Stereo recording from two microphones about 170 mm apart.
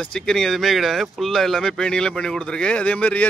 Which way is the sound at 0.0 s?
5° left (ahead or behind).